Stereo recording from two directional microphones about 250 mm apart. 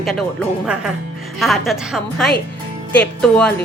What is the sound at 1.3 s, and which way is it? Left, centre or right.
Speech, centre.